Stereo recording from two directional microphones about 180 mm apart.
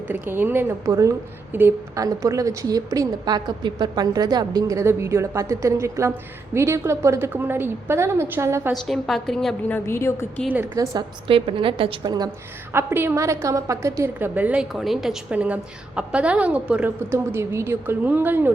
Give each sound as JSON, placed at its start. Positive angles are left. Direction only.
{"t": 0.1, "sound": "a woman's voice", "side_deg": -10}
{"t": 8.7, "sound": "a woman's voice", "side_deg": 0}
{"t": 10.5, "sound": "a woman's voice", "side_deg": -10}
{"t": 10.9, "sound": "a woman's voice", "side_deg": -30}
{"t": 12.7, "sound": "a woman's voice", "side_deg": -10}